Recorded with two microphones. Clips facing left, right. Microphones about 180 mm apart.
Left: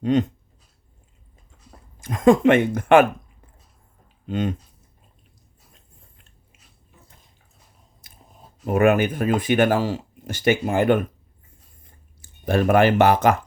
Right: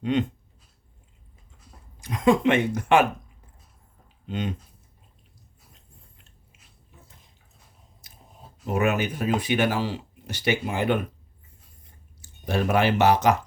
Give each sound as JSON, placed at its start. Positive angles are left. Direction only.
{"t": 0.0, "sound": "dog", "side_deg": 40}
{"t": 2.0, "sound": "speech", "side_deg": 50}
{"t": 4.3, "sound": "speech", "side_deg": 50}
{"t": 8.0, "sound": "chewing", "side_deg": 55}
{"t": 8.6, "sound": "speech", "side_deg": 55}
{"t": 12.2, "sound": "speech", "side_deg": 50}